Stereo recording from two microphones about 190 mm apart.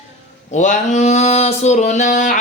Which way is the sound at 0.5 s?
40° left (ahead or behind).